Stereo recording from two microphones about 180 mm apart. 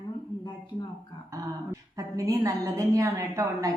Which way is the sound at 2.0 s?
20° right (ahead or behind).